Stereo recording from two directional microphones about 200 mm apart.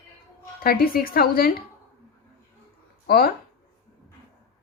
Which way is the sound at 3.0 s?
50° left (ahead or behind).